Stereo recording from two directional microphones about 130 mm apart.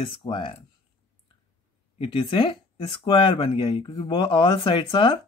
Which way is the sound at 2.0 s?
45° left (ahead or behind).